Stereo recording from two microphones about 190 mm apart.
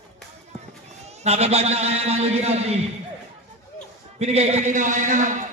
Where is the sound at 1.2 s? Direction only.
35° right (ahead or behind).